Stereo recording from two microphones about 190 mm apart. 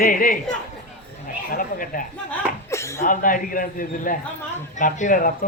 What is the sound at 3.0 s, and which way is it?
A man's voice, 45° left (ahead or behind).